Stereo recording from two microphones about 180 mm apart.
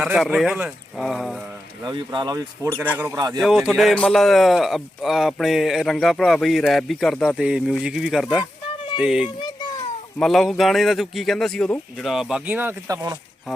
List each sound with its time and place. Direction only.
0.0 s speech: 5° right (ahead or behind)
1.9 s speech: 25° right (ahead or behind)